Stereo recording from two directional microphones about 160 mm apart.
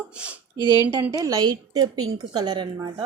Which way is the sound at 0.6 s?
25° left (ahead or behind).